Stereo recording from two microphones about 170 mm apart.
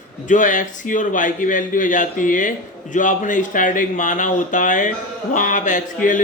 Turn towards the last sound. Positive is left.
turn(degrees=50)  # may be behind; listen again after turning